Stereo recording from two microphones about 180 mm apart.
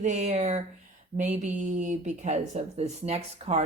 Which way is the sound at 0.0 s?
40° right (ahead or behind).